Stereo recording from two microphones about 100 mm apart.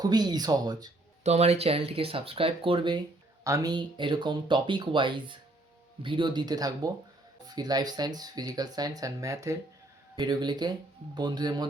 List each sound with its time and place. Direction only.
0.0 s speech: 45° right (ahead or behind)
1.3 s speech: 90° right; by 3.0 s 55° right (ahead or behind)
3.4 s speech: 35° right (ahead or behind)
10.2 s speech: 45° right (ahead or behind)